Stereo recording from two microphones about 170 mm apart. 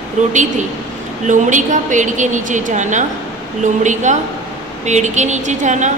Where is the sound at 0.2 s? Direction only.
45° right (ahead or behind).